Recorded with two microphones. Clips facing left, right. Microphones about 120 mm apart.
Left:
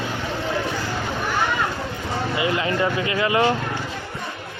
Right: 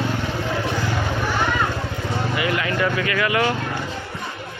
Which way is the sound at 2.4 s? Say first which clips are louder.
Left 1 dB; 25° left (ahead or behind).